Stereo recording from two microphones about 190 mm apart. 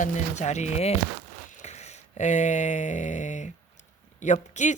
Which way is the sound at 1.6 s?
35° left (ahead or behind).